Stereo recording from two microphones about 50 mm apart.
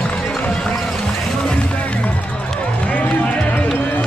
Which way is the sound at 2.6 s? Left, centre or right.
Left.